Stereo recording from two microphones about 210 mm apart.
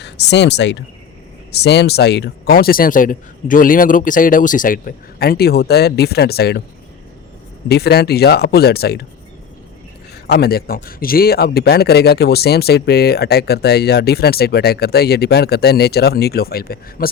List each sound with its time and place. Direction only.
0.0 s a man's voice: 55° left (ahead or behind)
7.7 s a man's voice: 50° left (ahead or behind)
10.2 s a man's voice: 50° left (ahead or behind)